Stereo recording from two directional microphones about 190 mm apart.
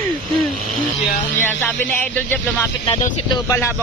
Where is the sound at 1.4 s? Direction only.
10° left (ahead or behind).